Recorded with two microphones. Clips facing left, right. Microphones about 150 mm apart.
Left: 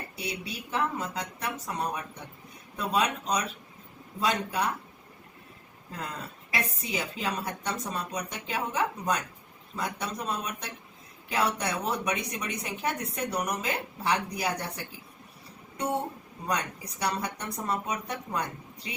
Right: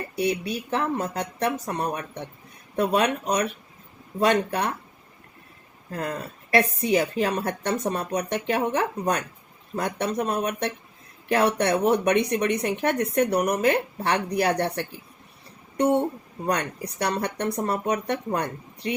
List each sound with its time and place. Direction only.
0.2 s a woman's voice: 65° right (ahead or behind)
5.9 s a woman's voice: 55° right (ahead or behind); by 14.8 s 70° right (ahead or behind)
16.5 s a woman's voice: 65° right (ahead or behind)